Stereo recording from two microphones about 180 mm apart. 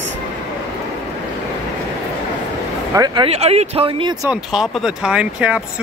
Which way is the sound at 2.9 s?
25° right (ahead or behind).